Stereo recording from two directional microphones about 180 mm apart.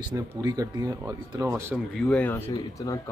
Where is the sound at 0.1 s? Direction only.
20° right (ahead or behind).